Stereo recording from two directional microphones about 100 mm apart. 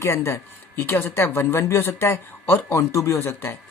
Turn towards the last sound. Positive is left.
turn(degrees=25)  # may be behind; listen again after turning